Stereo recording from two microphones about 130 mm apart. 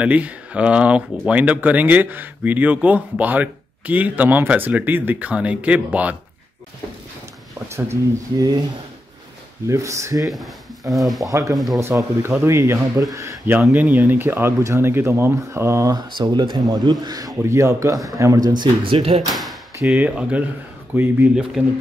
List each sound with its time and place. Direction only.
0.0 s speech: 10° right (ahead or behind)
7.6 s speech: 20° right (ahead or behind)
9.7 s speech: 25° right (ahead or behind)
10.2 s speech: centre (ahead or behind)
11.2 s speech: 25° right (ahead or behind)
11.5 s speech: centre (ahead or behind)
11.8 s speech: 20° right (ahead or behind)
13.7 s speech: 15° right (ahead or behind)
16.2 s speech: 35° right (ahead or behind)
19.2 s speech: centre (ahead or behind)